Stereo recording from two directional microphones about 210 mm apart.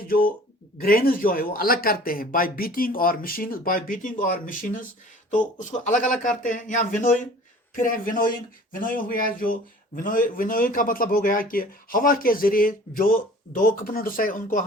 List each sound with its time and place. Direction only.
0.1 s speech: 45° left (ahead or behind)